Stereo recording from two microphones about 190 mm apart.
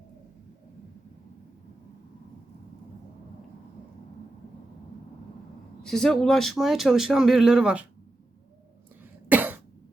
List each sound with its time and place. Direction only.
5.8 s speech: centre (ahead or behind)
9.3 s cough: 10° right (ahead or behind)